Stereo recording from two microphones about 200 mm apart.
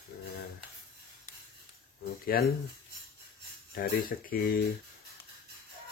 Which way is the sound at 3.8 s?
50° left (ahead or behind).